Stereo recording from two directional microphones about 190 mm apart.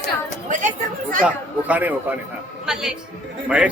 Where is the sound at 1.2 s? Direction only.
10° right (ahead or behind).